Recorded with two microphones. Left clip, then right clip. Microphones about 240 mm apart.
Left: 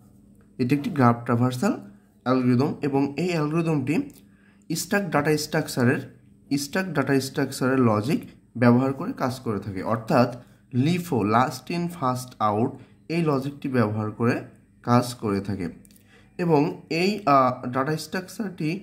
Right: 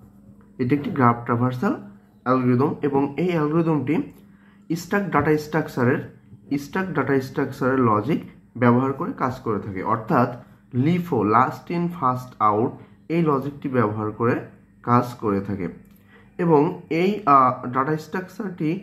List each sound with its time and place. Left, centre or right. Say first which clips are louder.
0.6 s speech: right 2 dB; left